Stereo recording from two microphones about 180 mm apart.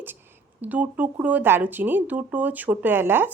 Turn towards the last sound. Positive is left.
turn(degrees=-10)  # may be behind; listen again after turning